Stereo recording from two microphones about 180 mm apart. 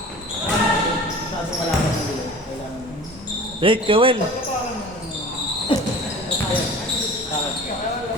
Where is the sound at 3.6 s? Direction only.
30° right (ahead or behind).